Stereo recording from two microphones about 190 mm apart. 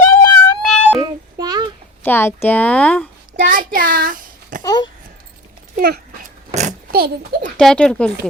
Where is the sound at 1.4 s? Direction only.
20° right (ahead or behind).